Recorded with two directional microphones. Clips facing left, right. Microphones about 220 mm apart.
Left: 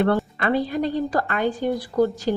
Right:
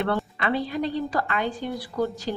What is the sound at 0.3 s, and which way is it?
A woman's voice, 45° left (ahead or behind).